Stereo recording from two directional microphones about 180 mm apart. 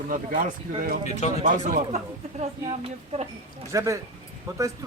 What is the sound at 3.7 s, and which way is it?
Speech, 15° right (ahead or behind).